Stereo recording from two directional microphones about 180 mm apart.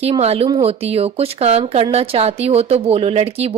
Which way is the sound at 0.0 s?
35° right (ahead or behind).